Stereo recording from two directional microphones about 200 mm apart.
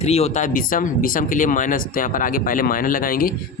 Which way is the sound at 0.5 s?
45° left (ahead or behind).